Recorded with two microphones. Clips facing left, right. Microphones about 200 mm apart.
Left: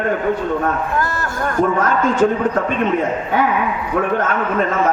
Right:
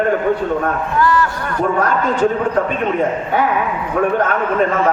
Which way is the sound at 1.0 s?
45° left (ahead or behind).